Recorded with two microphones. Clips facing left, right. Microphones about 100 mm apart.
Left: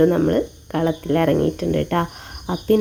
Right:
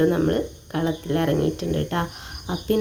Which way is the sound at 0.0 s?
40° left (ahead or behind).